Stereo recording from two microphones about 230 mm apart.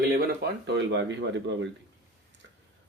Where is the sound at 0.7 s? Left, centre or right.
Right.